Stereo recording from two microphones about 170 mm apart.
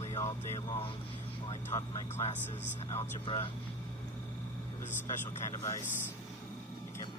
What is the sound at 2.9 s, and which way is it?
Speech, 30° left (ahead or behind).